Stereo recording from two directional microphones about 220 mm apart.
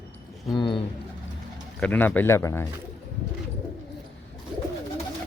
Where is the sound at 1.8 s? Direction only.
5° left (ahead or behind).